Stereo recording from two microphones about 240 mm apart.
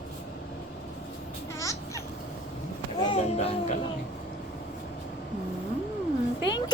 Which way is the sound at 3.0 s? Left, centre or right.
Left.